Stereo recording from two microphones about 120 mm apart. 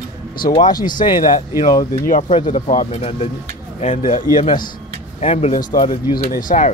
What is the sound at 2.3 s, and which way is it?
Speech, 55° left (ahead or behind).